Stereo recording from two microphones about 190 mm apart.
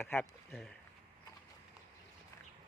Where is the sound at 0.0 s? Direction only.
10° left (ahead or behind).